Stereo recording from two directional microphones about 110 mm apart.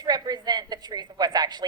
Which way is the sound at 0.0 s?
40° right (ahead or behind).